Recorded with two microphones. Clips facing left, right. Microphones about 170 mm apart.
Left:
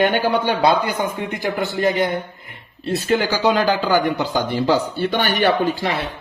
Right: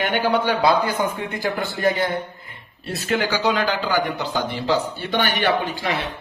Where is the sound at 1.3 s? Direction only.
20° left (ahead or behind).